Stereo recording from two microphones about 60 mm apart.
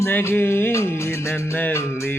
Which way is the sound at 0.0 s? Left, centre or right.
Left.